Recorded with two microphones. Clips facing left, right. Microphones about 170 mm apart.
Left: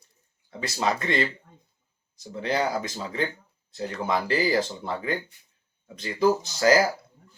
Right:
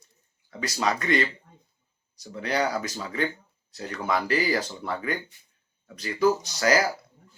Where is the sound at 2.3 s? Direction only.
25° left (ahead or behind).